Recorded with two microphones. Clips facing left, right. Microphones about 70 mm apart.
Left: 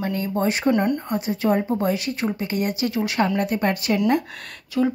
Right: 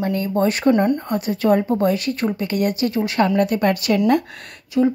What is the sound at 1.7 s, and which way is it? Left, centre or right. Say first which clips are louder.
Speech: right 4 dB; right.